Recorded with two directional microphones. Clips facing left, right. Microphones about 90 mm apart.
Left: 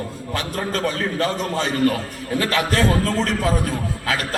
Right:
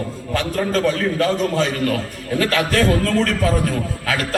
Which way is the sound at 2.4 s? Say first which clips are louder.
Right 2 dB; 25° left (ahead or behind).